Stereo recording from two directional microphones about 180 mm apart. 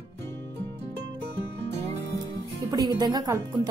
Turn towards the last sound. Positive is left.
turn(degrees=-20)  # may be behind; listen again after turning